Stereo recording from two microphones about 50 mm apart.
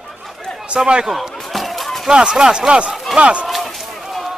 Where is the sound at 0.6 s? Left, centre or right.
Right.